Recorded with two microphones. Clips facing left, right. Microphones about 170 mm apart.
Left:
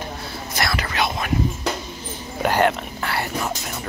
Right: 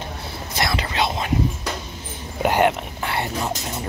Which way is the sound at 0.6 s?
20° right (ahead or behind).